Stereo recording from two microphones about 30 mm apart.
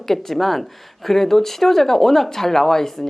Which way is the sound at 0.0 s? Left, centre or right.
Centre.